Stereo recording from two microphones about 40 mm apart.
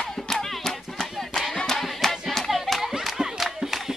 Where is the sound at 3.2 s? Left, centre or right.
Centre.